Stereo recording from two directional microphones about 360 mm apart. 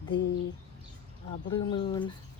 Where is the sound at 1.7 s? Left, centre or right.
Centre.